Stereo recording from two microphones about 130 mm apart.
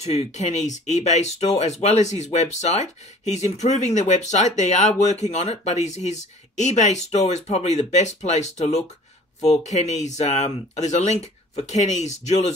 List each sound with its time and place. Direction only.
0.0 s speech: 55° left (ahead or behind)